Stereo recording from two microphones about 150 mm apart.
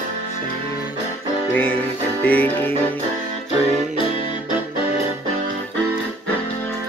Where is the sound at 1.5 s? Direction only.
15° left (ahead or behind).